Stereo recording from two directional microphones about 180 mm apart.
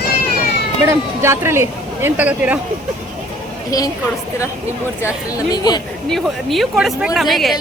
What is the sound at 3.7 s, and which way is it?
Speech, 20° left (ahead or behind).